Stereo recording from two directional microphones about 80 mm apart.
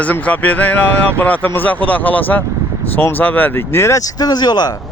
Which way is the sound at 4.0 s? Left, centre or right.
Left.